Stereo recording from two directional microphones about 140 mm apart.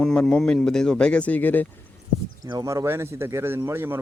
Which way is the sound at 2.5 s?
25° right (ahead or behind).